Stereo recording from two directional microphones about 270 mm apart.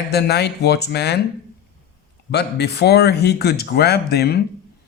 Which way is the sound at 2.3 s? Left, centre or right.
Left.